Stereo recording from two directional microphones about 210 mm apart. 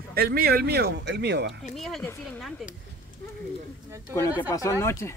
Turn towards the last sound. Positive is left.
turn(degrees=15)  # may be behind; listen again after turning